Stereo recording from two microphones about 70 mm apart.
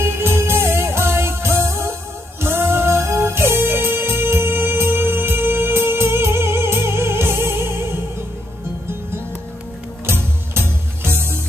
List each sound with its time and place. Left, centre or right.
0.0 s music: right
10.0 s music: right